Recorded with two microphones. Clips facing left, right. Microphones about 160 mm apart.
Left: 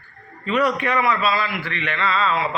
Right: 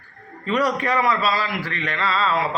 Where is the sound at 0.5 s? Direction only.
35° right (ahead or behind).